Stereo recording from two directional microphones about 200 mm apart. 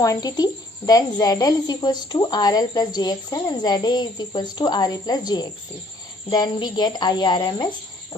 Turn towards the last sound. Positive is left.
turn(degrees=20)  # may be behind; listen again after turning